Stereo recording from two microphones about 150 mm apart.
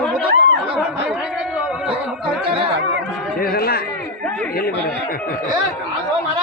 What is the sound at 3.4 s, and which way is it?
Speech, 85° left.